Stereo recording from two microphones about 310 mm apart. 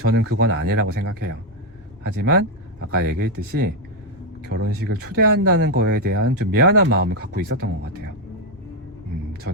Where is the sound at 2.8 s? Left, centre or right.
Right.